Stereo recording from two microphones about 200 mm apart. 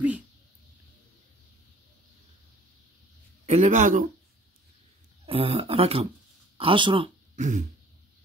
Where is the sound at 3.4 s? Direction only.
35° right (ahead or behind).